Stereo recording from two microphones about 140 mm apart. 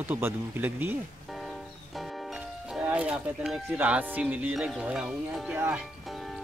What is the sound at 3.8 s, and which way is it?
Speech, 10° right (ahead or behind).